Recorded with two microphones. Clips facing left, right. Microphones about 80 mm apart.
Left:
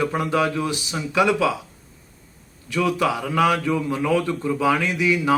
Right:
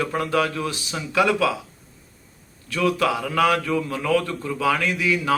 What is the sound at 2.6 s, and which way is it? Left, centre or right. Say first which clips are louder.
Speech: even; centre.